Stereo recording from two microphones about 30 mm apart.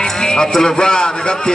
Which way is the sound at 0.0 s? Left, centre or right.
Left.